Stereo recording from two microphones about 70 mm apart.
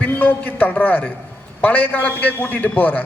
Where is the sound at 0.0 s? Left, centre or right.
Left.